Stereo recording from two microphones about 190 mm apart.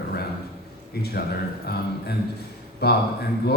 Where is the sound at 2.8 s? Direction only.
60° left (ahead or behind).